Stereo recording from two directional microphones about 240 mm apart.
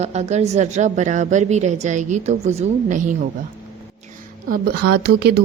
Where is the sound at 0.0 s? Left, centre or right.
Right.